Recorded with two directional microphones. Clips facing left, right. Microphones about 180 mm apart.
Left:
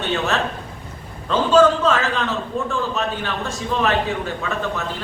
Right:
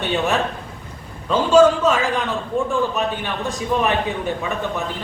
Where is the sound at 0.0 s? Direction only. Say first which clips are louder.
Right 1 dB; 15° right (ahead or behind).